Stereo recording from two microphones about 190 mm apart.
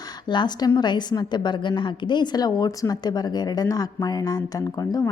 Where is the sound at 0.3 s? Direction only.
25° left (ahead or behind).